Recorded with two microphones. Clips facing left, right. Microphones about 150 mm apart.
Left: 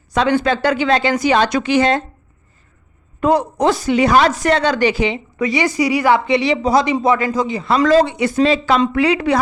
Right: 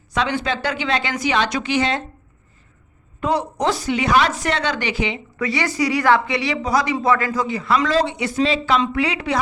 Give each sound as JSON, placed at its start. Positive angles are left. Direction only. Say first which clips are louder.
{"t": 0.1, "sound": "a woman's voice", "louder": "left 6 dB", "side_deg": 45}
{"t": 3.2, "sound": "speech", "louder": "left 6 dB", "side_deg": 50}
{"t": 5.4, "sound": "a woman's voice", "louder": "left 4 dB", "side_deg": 15}
{"t": 7.9, "sound": "a woman's voice", "louder": "left 6 dB", "side_deg": 45}